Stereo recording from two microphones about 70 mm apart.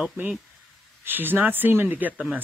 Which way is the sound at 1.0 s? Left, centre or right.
Right.